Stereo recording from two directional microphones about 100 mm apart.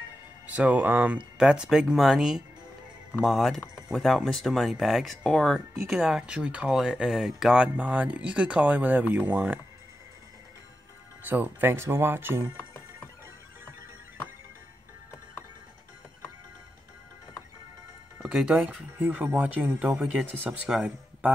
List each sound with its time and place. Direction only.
0.5 s speech: 15° right (ahead or behind)
11.2 s speech: 20° right (ahead or behind)
18.2 s speech: 5° right (ahead or behind)